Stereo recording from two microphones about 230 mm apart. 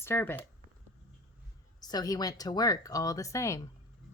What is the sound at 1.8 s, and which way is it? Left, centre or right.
Speech, centre.